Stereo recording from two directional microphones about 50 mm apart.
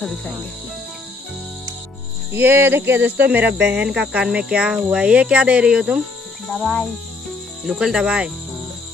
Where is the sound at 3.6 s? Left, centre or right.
Right.